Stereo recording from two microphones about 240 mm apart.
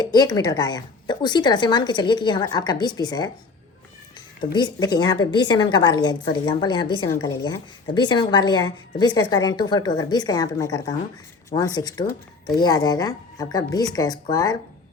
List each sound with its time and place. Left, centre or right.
0.0 s a woman's voice: centre
4.5 s a woman's voice: centre